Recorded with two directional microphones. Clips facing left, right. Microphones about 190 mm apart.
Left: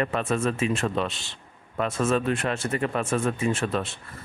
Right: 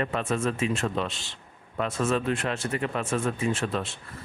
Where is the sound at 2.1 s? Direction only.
50° left (ahead or behind).